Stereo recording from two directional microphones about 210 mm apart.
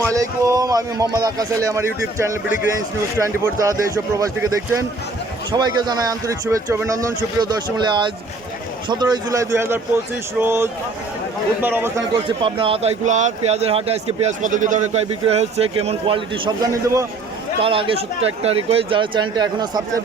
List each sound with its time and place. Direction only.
0.0 s a man's voice: 15° right (ahead or behind)
8.9 s a man's voice: 20° right (ahead or behind)
12.1 s speech: 25° right (ahead or behind)
17.6 s speech: 25° right (ahead or behind)